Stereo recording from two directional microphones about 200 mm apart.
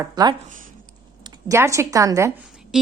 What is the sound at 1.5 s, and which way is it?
Speech, 15° right (ahead or behind).